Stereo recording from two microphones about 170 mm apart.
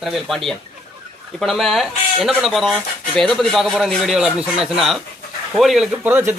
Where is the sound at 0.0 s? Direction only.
Centre (ahead or behind).